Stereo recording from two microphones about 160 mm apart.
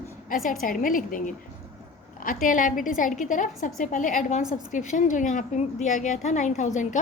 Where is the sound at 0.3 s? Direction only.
55° left (ahead or behind).